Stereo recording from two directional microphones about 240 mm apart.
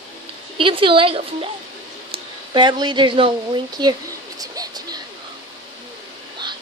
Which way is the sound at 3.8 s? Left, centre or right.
Centre.